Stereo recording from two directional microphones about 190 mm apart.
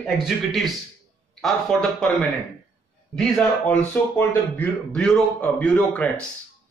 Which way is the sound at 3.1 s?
5° left (ahead or behind).